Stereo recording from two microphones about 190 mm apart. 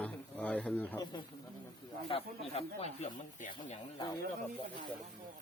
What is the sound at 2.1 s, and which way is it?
Speech, 30° left (ahead or behind).